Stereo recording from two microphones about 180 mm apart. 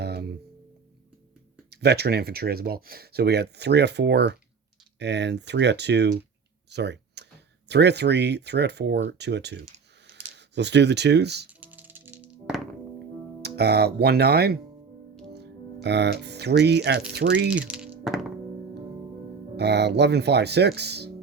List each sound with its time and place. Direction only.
0.0 s music: 65° right (ahead or behind)
1.7 s speech: 65° right (ahead or behind)
6.7 s computer keyboard: 70° right (ahead or behind)
7.7 s speech: 70° right (ahead or behind)
11.6 s music: 10° right (ahead or behind)
13.4 s speech: 65° right (ahead or behind)
17.5 s music: 5° right (ahead or behind)
19.5 s speech: 70° right (ahead or behind)